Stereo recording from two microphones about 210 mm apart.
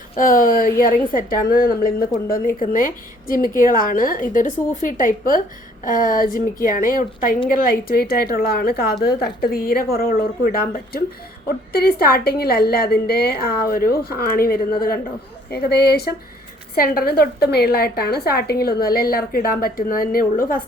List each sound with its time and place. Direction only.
0.2 s a woman's voice: 40° left (ahead or behind)